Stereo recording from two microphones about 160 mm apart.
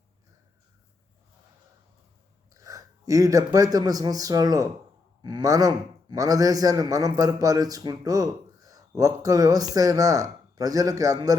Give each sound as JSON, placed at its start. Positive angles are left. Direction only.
{"t": 2.5, "sound": "a man's voice", "side_deg": -20}